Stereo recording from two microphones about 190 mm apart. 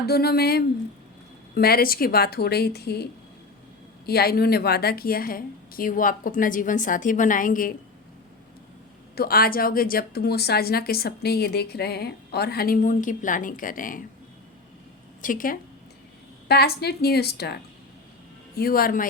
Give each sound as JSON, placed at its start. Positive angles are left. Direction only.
{"t": 0.0, "sound": "a woman's voice", "side_deg": 55}
{"t": 9.1, "sound": "a woman's voice", "side_deg": 50}
{"t": 15.2, "sound": "a woman's voice", "side_deg": 45}
{"t": 16.5, "sound": "a woman's voice", "side_deg": 55}